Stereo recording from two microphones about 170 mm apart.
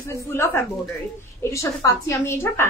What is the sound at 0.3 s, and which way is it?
A woman's voice, 15° left (ahead or behind).